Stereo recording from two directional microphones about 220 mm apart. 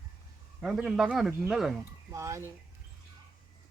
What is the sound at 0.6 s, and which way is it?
Speech, centre (ahead or behind).